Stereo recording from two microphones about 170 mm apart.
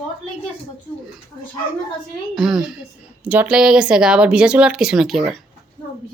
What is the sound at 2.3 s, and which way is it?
Speech, centre (ahead or behind).